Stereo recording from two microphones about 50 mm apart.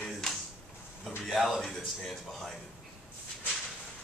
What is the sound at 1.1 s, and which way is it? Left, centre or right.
Speech, centre.